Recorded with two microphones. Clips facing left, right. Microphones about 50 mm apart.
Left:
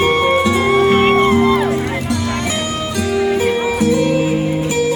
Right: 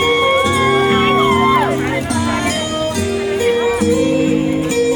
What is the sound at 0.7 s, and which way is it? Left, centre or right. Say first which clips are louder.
Music: left 4 dB; right.